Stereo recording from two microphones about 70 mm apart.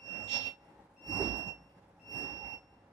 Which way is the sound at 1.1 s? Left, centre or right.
Right.